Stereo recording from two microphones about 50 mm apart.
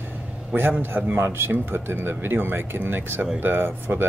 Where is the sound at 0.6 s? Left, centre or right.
Right.